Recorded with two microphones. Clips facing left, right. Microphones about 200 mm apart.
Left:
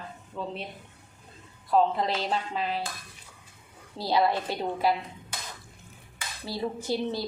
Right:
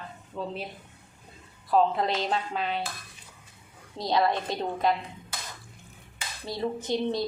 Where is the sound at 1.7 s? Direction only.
Centre (ahead or behind).